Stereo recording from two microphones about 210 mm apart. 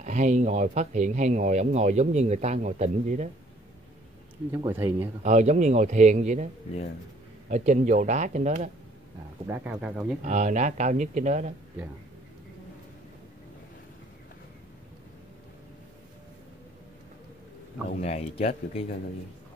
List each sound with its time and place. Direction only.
0.0 s speech: 35° right (ahead or behind)
4.5 s speech: 10° right (ahead or behind)
5.2 s speech: 35° right (ahead or behind)
9.5 s speech: 5° right (ahead or behind)
10.2 s speech: 35° right (ahead or behind)
18.0 s speech: 30° left (ahead or behind)